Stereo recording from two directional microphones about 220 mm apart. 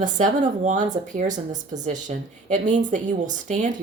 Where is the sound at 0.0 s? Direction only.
35° right (ahead or behind).